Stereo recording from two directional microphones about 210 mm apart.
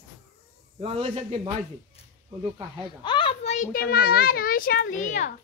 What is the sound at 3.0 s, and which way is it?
A child's voice, 25° left (ahead or behind).